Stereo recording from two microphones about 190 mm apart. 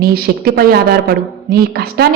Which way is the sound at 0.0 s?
55° right (ahead or behind).